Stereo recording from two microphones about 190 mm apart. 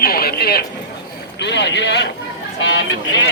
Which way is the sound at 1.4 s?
65° left (ahead or behind).